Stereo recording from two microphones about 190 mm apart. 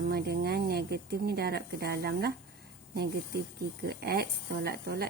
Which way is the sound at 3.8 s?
55° right (ahead or behind).